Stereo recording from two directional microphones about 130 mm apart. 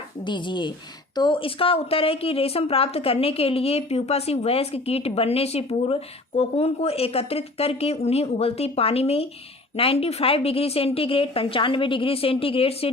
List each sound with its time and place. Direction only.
0.3 s a woman's voice: 35° left (ahead or behind)